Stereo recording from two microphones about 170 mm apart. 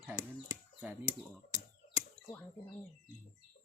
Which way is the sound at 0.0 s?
15° right (ahead or behind).